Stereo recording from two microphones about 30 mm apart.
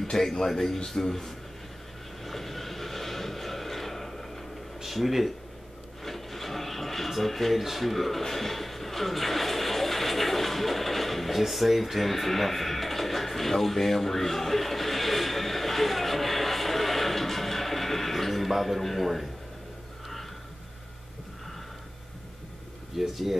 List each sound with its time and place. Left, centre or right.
0.2 s a man's voice: centre
2.2 s vehicle: centre
4.8 s speech: centre
6.0 s rub: centre
7.6 s speech: centre
8.2 s music: centre
22.9 s speech: centre